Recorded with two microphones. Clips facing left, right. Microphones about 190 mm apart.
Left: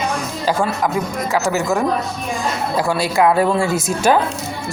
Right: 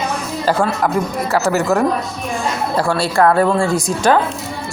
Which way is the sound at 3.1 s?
10° left (ahead or behind).